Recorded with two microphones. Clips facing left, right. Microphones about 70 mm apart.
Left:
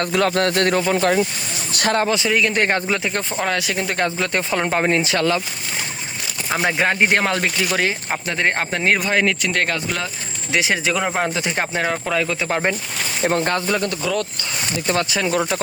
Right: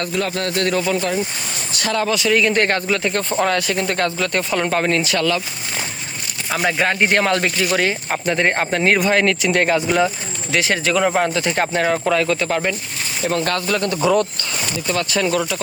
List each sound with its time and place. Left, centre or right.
0.1 s a sound: left
1.7 s speech: left
2.0 s speech: left
2.3 s speech: centre
2.7 s speech: centre
4.2 s speech: left
6.7 s speech: centre
10.5 s speech: centre
12.5 s speech: left
13.8 s speech: centre
15.1 s speech: centre